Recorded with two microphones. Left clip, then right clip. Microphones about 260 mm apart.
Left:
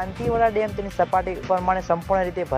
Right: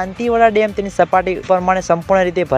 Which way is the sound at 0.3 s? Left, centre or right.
Right.